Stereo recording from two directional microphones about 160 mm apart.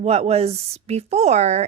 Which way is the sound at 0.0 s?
40° right (ahead or behind).